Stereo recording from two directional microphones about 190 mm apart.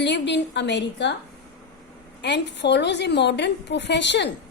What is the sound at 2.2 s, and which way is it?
A woman's voice, 65° left (ahead or behind).